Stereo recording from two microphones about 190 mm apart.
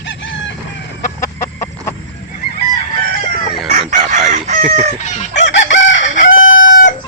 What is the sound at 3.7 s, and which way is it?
Chicken, 40° right (ahead or behind).